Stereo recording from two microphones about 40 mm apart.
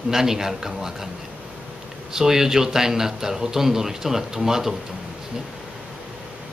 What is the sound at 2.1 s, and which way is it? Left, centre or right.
Speech, centre.